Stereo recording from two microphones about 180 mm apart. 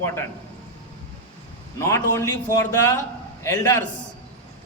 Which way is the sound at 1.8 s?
15° left (ahead or behind).